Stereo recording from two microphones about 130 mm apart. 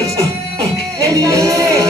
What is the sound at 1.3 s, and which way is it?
Music, 25° right (ahead or behind).